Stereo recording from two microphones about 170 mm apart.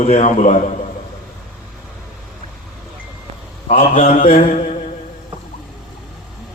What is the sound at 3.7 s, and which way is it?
Mantra, 40° left (ahead or behind).